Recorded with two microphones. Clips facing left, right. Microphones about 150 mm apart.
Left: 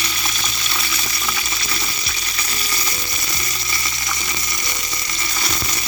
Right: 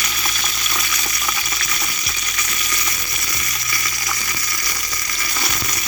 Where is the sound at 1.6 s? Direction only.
30° left (ahead or behind).